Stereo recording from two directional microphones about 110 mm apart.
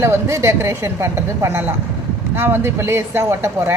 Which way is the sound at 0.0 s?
25° right (ahead or behind).